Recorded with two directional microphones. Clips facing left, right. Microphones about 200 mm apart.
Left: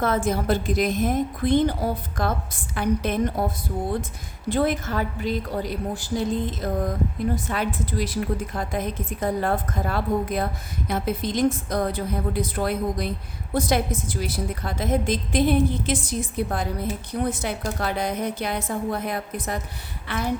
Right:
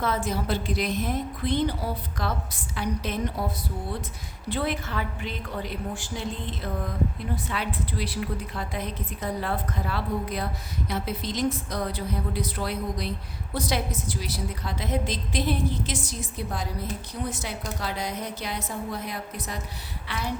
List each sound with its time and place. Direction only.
0.0 s a woman's voice: 50° left (ahead or behind)
4.4 s a woman's voice: 45° left (ahead or behind)